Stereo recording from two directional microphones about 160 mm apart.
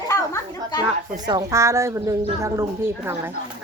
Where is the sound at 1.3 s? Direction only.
20° right (ahead or behind).